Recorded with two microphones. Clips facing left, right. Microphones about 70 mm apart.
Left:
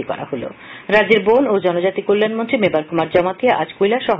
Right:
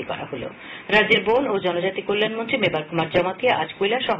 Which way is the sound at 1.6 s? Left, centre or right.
Left.